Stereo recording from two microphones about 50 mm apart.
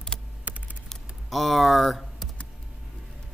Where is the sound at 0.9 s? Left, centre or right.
Centre.